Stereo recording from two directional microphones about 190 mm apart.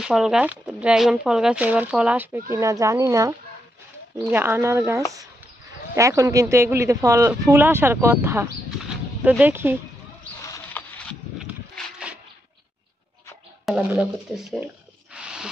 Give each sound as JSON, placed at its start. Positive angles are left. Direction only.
{"t": 0.0, "sound": "speech", "side_deg": -5}
{"t": 10.4, "sound": "rodents", "side_deg": 10}
{"t": 11.3, "sound": "a sound", "side_deg": -5}
{"t": 13.7, "sound": "speech", "side_deg": -5}
{"t": 15.1, "sound": "music", "side_deg": -5}